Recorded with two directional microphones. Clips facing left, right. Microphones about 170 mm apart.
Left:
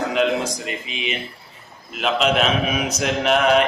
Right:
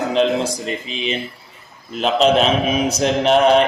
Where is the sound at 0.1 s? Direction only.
30° right (ahead or behind).